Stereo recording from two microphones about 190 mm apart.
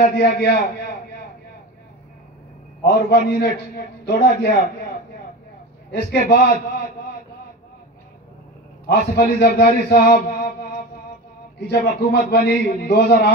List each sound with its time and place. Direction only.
0.0 s a man's voice: 55° left (ahead or behind)
2.8 s a man's voice: 55° left (ahead or behind)
5.9 s a man's voice: 60° left (ahead or behind)
8.8 s a man's voice: 55° left (ahead or behind)
11.6 s a man's voice: 60° left (ahead or behind)